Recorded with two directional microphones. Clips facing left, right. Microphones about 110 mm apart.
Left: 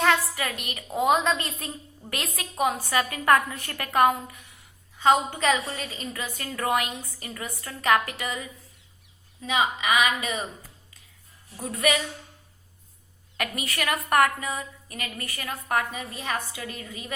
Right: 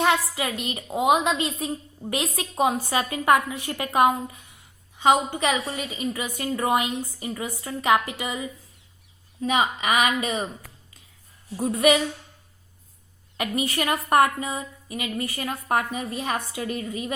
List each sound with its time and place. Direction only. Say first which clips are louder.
0.1 s a woman's voice: right 1 dB; 20° right (ahead or behind)
0.9 s a woman's voice: right 2 dB; 15° right (ahead or behind)
4.9 s a woman's voice: right 1 dB; 15° right (ahead or behind)
6.3 s a woman's voice: right 2 dB; 20° right (ahead or behind)
9.4 s a woman's voice: right 2 dB; 40° right (ahead or behind)
11.5 s a woman's voice: right 6 dB; 25° right (ahead or behind)
13.3 s a woman's voice: right 5 dB; 25° right (ahead or behind)
15.4 s a woman's voice: right 1 dB; 30° right (ahead or behind)